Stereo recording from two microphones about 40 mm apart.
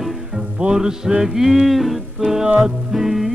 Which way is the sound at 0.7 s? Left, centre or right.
Centre.